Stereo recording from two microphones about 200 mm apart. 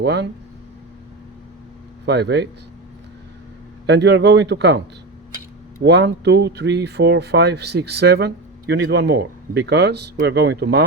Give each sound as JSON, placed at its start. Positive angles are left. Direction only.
{"t": 0.0, "sound": "speech", "side_deg": -55}
{"t": 2.0, "sound": "speech", "side_deg": -55}
{"t": 3.8, "sound": "speech", "side_deg": -60}
{"t": 5.8, "sound": "speech", "side_deg": -60}